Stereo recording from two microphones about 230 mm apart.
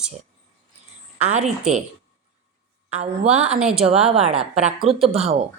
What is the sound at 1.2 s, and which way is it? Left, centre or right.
Speech, right.